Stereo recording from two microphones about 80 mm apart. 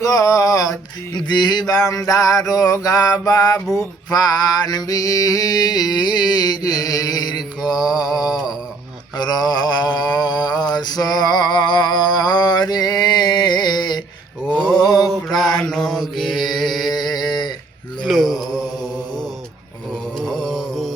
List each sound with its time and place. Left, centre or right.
0.0 s mantra: left
1.3 s mantra: left
9.1 s mantra: left
15.0 s mantra: centre
16.9 s a sound: left
18.0 s mantra: centre